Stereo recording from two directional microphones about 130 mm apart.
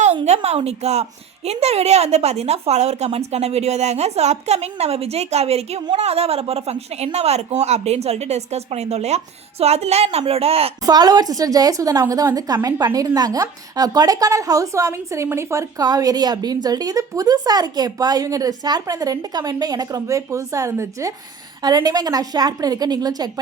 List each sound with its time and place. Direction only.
0.4 s a woman's voice: 50° right (ahead or behind)
10.8 s a woman's voice: 30° right (ahead or behind)